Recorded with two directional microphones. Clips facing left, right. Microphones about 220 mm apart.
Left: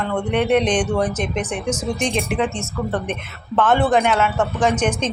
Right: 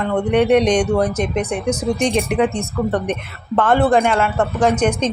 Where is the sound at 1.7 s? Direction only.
60° right (ahead or behind).